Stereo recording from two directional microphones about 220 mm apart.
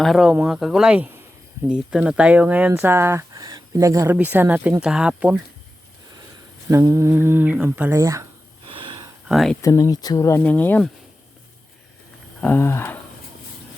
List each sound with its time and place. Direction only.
0.0 s speech: centre (ahead or behind)
6.7 s speech: 15° right (ahead or behind)
8.6 s wheeze: 25° right (ahead or behind)
9.3 s speech: centre (ahead or behind)
9.6 s speech: 15° left (ahead or behind)
12.4 s speech: 10° left (ahead or behind)